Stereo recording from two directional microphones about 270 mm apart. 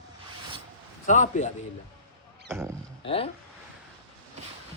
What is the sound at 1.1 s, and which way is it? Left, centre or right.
Speech, left.